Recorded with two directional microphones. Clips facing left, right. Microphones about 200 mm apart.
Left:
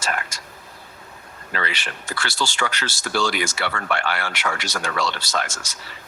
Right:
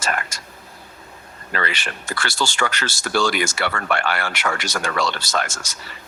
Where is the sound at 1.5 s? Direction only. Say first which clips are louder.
Right 2 dB; 50° right (ahead or behind).